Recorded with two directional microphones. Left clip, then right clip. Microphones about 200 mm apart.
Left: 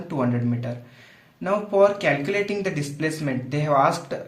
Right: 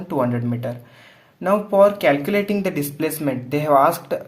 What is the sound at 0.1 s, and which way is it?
Speech, 30° right (ahead or behind).